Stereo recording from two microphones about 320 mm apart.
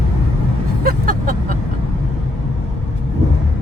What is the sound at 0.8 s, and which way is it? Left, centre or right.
Vehicle, right.